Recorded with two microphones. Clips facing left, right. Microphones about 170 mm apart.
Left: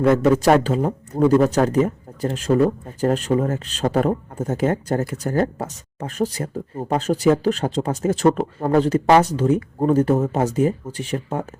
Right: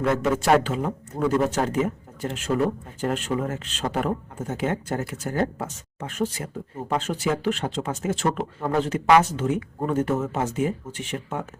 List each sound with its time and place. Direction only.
0.0 s speech: 35° left (ahead or behind)